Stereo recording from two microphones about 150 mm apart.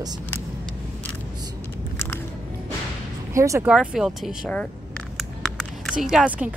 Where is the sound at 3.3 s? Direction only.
20° right (ahead or behind).